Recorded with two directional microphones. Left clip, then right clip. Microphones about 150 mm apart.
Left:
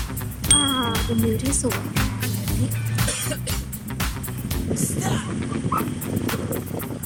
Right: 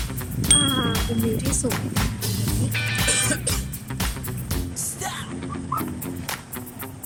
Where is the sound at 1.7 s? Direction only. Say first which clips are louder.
Left 1 dB; centre (ahead or behind).